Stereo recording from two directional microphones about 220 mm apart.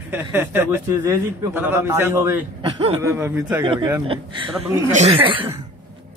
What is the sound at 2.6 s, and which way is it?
Speech, 25° right (ahead or behind).